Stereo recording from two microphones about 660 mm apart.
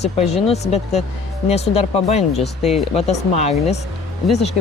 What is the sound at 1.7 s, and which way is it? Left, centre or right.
Speech, left.